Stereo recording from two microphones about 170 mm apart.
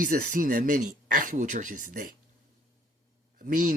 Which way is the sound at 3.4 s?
50° right (ahead or behind).